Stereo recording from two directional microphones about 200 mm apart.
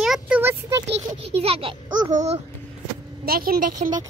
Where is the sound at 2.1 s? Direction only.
35° right (ahead or behind).